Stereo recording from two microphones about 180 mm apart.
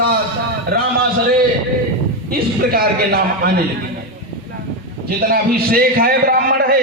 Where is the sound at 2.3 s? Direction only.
60° right (ahead or behind).